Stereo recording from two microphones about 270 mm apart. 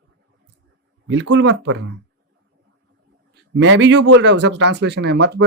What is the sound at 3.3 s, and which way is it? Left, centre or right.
Speech, right.